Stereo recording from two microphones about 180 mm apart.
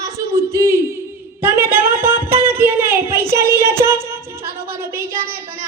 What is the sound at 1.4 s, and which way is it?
Music, 10° right (ahead or behind).